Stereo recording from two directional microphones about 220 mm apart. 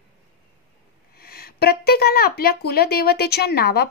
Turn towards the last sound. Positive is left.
turn(degrees=45)  # may be behind; listen again after turning